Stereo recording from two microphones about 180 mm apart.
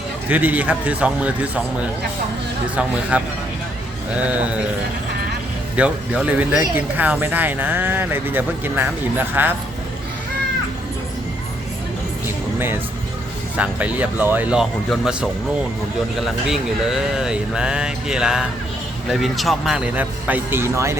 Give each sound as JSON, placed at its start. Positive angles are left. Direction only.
{"t": 0.3, "sound": "speech", "side_deg": -10}
{"t": 5.7, "sound": "speech", "side_deg": -5}
{"t": 13.6, "sound": "speech", "side_deg": -10}